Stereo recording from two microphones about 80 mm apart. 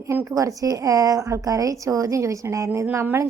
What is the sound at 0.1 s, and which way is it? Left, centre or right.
Speech, right.